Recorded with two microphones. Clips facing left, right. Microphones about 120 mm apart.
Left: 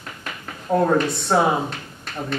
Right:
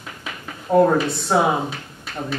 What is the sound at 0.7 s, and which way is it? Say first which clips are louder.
Speech: right 3 dB; 5° right (ahead or behind).